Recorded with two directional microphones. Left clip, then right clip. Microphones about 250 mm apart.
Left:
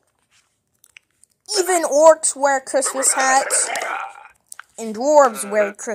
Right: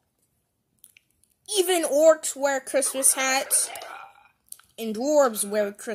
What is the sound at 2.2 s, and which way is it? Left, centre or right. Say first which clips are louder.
Speech: left 7 dB; centre.